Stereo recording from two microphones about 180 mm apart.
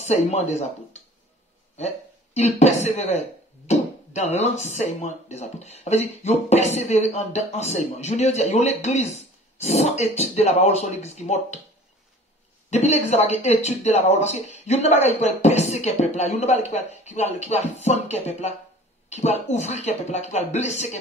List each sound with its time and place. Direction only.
0.0 s speech: 40° left (ahead or behind)
2.3 s speech: 40° left (ahead or behind)
12.6 s speech: 40° left (ahead or behind)